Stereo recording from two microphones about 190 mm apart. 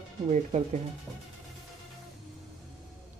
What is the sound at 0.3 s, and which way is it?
Speech, 35° right (ahead or behind).